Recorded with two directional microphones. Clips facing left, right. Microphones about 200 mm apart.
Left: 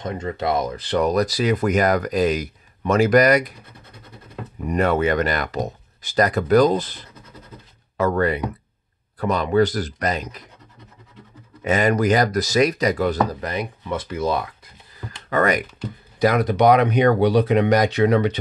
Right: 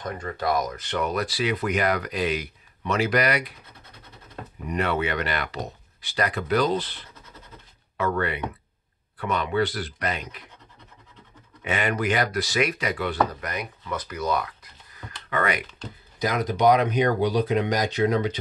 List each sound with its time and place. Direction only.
0.0 s speech: 20° left (ahead or behind); by 3.5 s 45° left (ahead or behind)
4.6 s speech: 45° left (ahead or behind)
11.6 s speech: 40° left (ahead or behind)
15.2 s speech: 40° left (ahead or behind)
16.2 s speech: 65° left (ahead or behind)